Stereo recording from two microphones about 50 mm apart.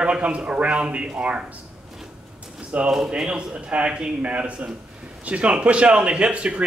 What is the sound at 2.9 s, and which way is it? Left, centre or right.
Speech, centre.